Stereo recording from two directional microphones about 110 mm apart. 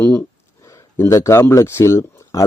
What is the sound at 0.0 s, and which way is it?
Speech, 20° left (ahead or behind).